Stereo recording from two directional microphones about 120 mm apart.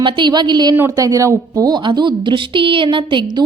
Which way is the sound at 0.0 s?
40° right (ahead or behind).